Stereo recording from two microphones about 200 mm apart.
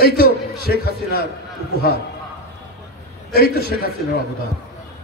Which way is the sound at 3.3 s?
50° left (ahead or behind).